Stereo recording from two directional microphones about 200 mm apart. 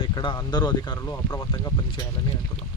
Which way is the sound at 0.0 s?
25° left (ahead or behind).